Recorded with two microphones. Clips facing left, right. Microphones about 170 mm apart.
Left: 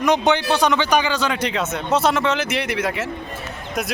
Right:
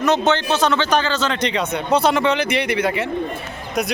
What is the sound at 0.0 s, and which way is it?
Speech, 15° left (ahead or behind).